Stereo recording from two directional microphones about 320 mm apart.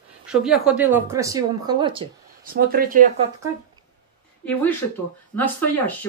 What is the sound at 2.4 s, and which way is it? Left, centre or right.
Speech, right.